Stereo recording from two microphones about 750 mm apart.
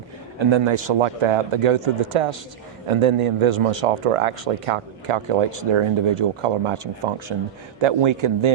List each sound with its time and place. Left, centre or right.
0.3 s a man's voice: right